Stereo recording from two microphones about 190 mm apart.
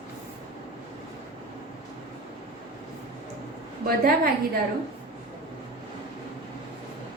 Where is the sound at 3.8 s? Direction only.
55° right (ahead or behind).